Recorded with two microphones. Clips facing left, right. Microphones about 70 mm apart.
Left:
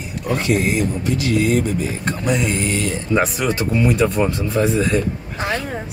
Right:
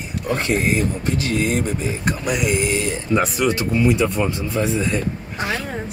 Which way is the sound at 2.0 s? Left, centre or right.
Centre.